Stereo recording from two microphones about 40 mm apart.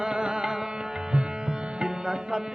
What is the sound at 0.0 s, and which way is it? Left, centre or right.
Music, centre.